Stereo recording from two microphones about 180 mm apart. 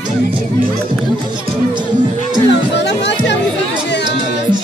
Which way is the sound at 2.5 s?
75° left (ahead or behind).